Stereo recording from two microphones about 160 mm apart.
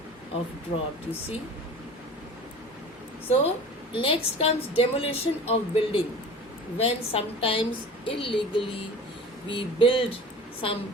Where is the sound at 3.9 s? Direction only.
35° left (ahead or behind).